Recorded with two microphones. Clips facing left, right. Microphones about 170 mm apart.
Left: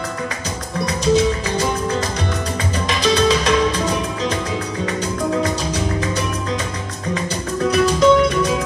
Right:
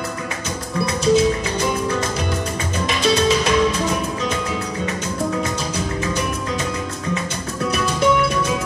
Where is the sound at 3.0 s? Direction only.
30° left (ahead or behind).